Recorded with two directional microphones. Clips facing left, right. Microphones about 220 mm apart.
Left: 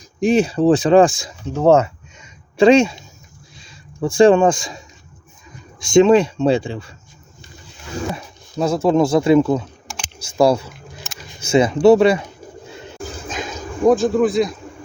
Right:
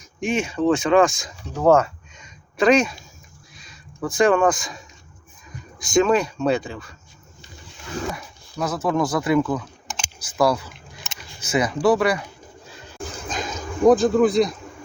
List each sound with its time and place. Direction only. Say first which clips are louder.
0.2 s speech: left 7 dB; 35° left (ahead or behind)
5.8 s speech: left 7 dB; 25° left (ahead or behind)
8.1 s speech: left 6 dB; 25° left (ahead or behind)
13.0 s a sound: left 1 dB; centre (ahead or behind)